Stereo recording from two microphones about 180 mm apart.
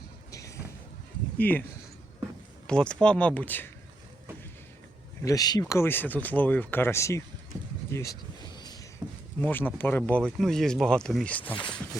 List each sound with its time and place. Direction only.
0.3 s a sound: 20° left (ahead or behind)
1.4 s speech: 10° left (ahead or behind)
2.6 s speech: 5° left (ahead or behind)
5.2 s speech: 20° left (ahead or behind)
7.9 s a sound: 15° left (ahead or behind)
9.4 s speech: 10° left (ahead or behind)
11.5 s speech: 25° left (ahead or behind)